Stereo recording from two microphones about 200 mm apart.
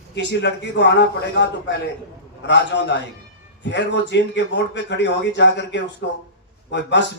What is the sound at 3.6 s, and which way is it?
A man's voice, 60° left (ahead or behind).